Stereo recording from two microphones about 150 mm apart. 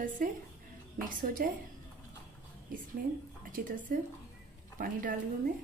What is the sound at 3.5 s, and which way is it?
A woman's voice, 65° right (ahead or behind).